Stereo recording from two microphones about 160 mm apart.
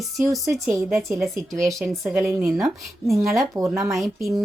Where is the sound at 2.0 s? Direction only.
15° right (ahead or behind).